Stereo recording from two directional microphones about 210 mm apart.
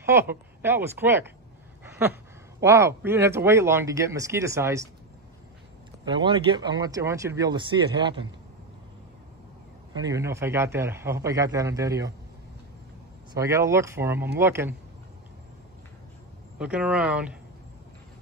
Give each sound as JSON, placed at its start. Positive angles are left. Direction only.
{"t": 0.0, "sound": "speech", "side_deg": -10}
{"t": 1.9, "sound": "a sound", "side_deg": -10}
{"t": 2.6, "sound": "speech", "side_deg": -10}
{"t": 6.0, "sound": "speech", "side_deg": -25}
{"t": 9.9, "sound": "speech", "side_deg": -15}
{"t": 13.3, "sound": "speech", "side_deg": -15}
{"t": 16.5, "sound": "speech", "side_deg": -5}